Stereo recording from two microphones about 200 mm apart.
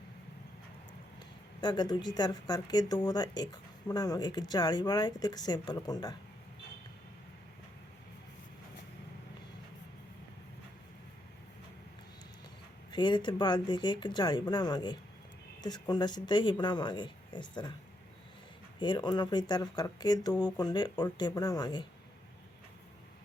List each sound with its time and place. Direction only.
1.6 s speech: 20° left (ahead or behind)
12.9 s speech: 20° left (ahead or behind)
18.8 s speech: 20° left (ahead or behind)